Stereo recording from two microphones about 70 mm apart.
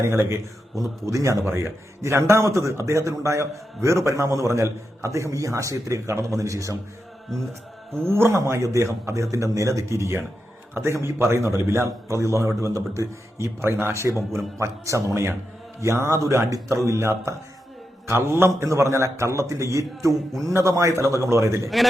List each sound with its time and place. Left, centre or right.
1.0 s a man's voice: right
8.0 s a man's voice: right